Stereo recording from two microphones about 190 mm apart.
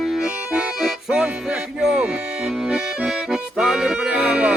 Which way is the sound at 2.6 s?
5° right (ahead or behind).